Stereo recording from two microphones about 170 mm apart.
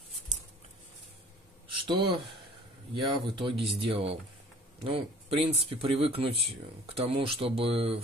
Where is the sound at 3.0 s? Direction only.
30° right (ahead or behind).